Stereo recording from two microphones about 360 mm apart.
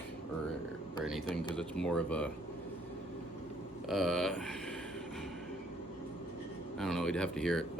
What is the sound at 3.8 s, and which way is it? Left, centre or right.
Speech, centre.